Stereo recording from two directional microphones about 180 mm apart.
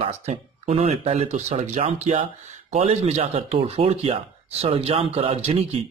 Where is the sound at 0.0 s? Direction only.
35° right (ahead or behind).